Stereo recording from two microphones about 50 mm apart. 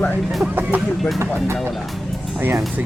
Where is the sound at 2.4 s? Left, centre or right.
Right.